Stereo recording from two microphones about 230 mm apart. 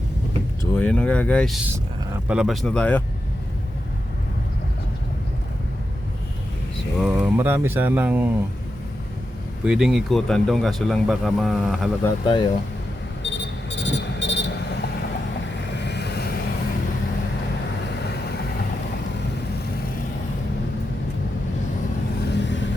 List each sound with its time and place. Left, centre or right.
0.6 s speech: centre
7.0 s speech: centre
9.6 s speech: centre
12.0 s speech: centre
13.2 s vehicle: left
18.0 s vehicle: left
22.2 s vehicle: left